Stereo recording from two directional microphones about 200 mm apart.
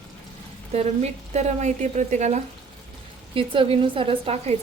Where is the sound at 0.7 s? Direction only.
30° right (ahead or behind).